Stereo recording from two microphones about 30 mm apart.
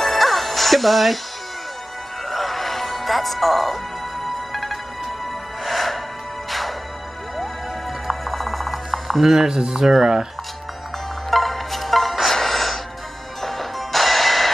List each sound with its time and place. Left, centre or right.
0.0 s music: centre
2.2 s music: centre
8.1 s music: centre
9.5 s speech: right
11.2 s music: centre